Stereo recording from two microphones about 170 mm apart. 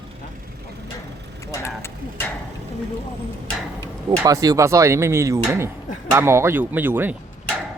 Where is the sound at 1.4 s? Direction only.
15° left (ahead or behind).